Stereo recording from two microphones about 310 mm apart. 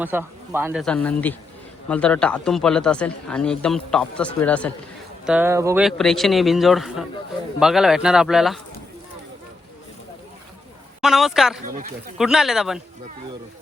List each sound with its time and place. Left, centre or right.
0.0 s a man's voice: centre
11.0 s a man's voice: centre
11.6 s speech: right
12.1 s a man's voice: centre